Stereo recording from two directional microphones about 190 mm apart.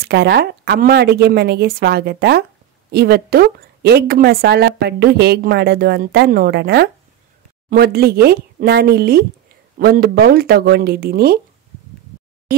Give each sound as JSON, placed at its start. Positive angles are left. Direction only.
{"t": 0.0, "sound": "a woman's voice", "side_deg": -60}